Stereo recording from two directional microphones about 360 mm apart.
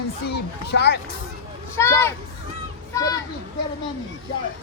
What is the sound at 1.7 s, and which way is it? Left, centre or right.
Speech, centre.